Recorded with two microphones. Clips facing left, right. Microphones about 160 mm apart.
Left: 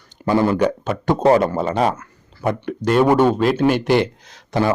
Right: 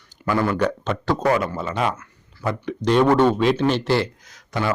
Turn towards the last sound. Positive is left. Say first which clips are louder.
# left 6 dB
turn(degrees=30)  # may be behind; listen again after turning